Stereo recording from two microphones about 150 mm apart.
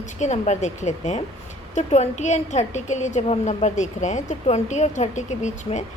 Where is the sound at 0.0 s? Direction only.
50° left (ahead or behind).